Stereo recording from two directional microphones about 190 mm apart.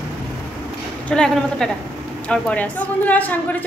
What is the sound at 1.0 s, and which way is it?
A woman's voice, 5° left (ahead or behind).